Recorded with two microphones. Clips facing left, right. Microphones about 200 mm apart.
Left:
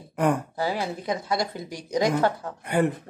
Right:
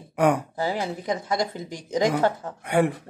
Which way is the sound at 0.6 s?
15° right (ahead or behind).